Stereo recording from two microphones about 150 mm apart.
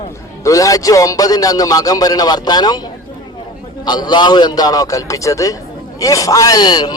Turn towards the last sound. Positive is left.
turn(degrees=30)  # may be behind; listen again after turning